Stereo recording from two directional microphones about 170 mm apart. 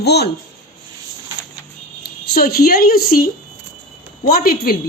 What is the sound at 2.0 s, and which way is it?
A woman's voice, 65° left (ahead or behind).